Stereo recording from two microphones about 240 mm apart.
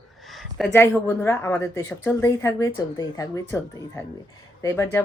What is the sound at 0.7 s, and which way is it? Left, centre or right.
A woman's voice, centre.